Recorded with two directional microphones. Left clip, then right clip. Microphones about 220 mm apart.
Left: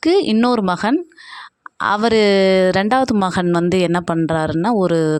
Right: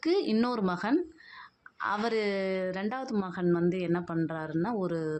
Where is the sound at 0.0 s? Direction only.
45° left (ahead or behind).